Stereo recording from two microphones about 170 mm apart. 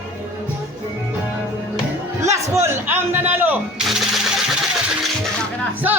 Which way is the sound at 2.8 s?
10° right (ahead or behind).